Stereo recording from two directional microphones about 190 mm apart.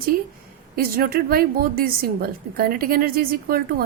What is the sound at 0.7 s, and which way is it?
A woman's voice, 50° right (ahead or behind).